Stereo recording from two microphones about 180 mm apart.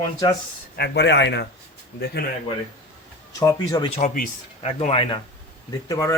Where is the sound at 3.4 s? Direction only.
20° left (ahead or behind).